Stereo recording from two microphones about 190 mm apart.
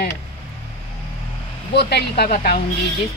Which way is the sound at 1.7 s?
60° left (ahead or behind).